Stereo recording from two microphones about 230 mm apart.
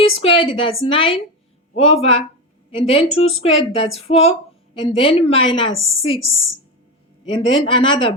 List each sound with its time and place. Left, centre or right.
0.2 s speech: left
7.3 s speech: left